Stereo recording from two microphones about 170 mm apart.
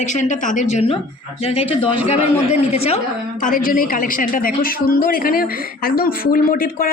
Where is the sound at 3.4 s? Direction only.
50° left (ahead or behind).